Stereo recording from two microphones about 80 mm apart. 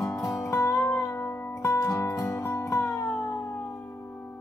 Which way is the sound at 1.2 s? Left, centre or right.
Left.